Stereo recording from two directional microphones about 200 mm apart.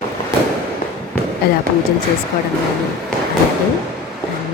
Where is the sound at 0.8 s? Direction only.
40° left (ahead or behind).